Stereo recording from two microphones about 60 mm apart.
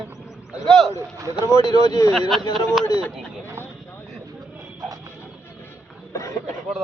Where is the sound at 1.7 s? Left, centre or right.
Left.